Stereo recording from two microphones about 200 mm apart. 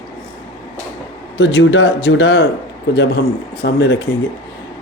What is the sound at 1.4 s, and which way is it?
Speech, 70° left (ahead or behind).